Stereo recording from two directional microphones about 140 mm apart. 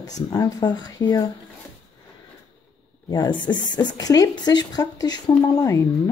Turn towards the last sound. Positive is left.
turn(degrees=25)  # may be behind; listen again after turning